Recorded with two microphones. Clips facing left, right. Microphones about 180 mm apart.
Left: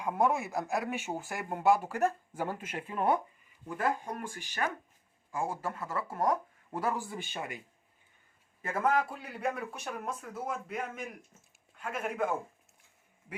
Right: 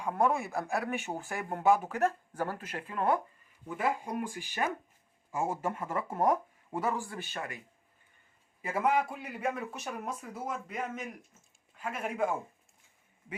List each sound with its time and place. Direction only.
0.0 s a man's voice: 10° left (ahead or behind)
2.4 s speech: 20° left (ahead or behind)
3.7 s speech: 5° right (ahead or behind)
6.7 s speech: centre (ahead or behind)
7.1 s speech: 20° left (ahead or behind)
8.6 s a man's voice: centre (ahead or behind)